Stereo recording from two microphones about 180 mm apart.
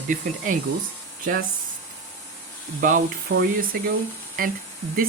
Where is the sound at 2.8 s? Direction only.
45° right (ahead or behind).